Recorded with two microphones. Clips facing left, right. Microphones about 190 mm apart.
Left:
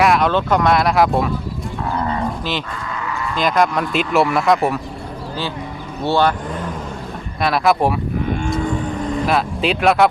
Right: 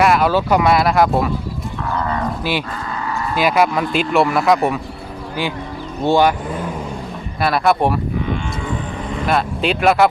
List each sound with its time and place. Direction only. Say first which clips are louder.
0.0 s speech: right 1 dB; centre (ahead or behind)
2.4 s speech: right 3 dB; 10° right (ahead or behind)
2.7 s cattle: right 2 dB; 35° right (ahead or behind)
3.3 s speech: right 1 dB; 5° right (ahead or behind)
6.0 s speech: right 2 dB; 15° right (ahead or behind)
7.4 s speech: even; centre (ahead or behind)
9.2 s speech: right 2 dB; centre (ahead or behind)